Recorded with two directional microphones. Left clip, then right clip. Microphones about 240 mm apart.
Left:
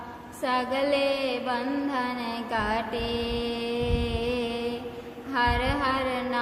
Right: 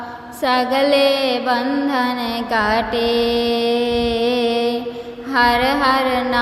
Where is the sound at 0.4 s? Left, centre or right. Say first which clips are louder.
Right 10 dB; right.